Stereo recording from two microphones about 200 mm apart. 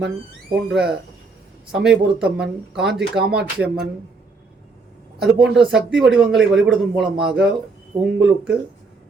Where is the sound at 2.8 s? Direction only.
55° right (ahead or behind).